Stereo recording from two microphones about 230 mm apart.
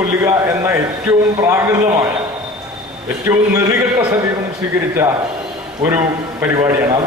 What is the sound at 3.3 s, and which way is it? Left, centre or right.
Speech, centre.